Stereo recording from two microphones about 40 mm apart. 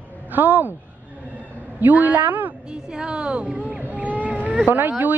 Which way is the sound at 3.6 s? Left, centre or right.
Right.